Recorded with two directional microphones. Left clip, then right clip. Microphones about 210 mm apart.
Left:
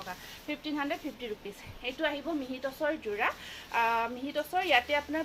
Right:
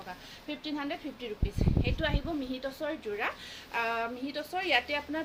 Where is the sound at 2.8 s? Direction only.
10° right (ahead or behind).